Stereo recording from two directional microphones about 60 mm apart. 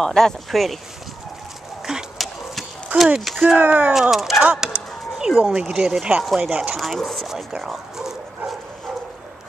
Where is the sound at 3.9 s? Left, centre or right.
Centre; by 6.8 s right.